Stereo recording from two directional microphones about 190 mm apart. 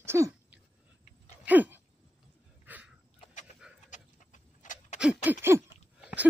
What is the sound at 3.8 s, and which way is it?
Vehicle, 40° left (ahead or behind).